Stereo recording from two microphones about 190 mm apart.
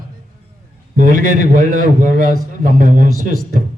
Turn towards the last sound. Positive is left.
turn(degrees=-45)  # may be behind; listen again after turning